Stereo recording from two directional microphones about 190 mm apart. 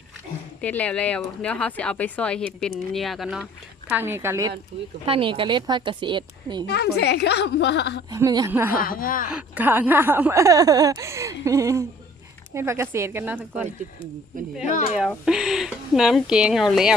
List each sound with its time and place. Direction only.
0.6 s speech: 5° left (ahead or behind)
3.8 s speech: 10° right (ahead or behind)
5.0 s a woman's voice: 25° right (ahead or behind)
6.7 s a woman's voice: 60° left (ahead or behind)
8.1 s speech: 20° right (ahead or behind)
8.7 s speech: 50° left (ahead or behind)
9.3 s speech: 10° right (ahead or behind)
14.6 s speech: 40° left (ahead or behind)
15.2 s speech: centre (ahead or behind)